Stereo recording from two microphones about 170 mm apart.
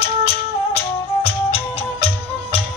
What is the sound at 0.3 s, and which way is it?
Music, 35° left (ahead or behind).